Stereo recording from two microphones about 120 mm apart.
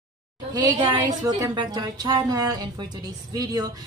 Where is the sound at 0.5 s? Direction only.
35° right (ahead or behind).